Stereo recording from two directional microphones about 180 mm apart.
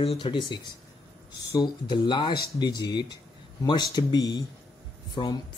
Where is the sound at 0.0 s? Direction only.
30° left (ahead or behind).